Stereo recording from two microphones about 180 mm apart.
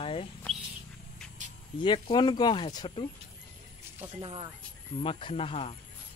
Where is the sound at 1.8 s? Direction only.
25° left (ahead or behind).